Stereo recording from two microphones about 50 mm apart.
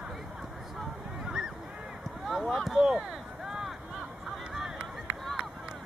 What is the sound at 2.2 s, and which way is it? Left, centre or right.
Speech, centre.